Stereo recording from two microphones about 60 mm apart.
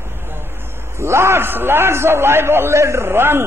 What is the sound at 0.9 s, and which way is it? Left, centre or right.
A man's voice, right.